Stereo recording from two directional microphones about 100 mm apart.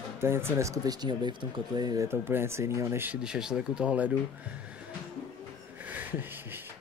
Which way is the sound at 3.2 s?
5° right (ahead or behind).